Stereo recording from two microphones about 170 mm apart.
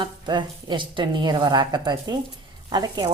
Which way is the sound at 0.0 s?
25° right (ahead or behind).